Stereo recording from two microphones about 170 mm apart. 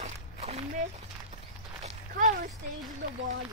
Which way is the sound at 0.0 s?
40° right (ahead or behind).